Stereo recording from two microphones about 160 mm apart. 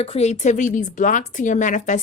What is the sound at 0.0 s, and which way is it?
A woman's voice, 40° left (ahead or behind).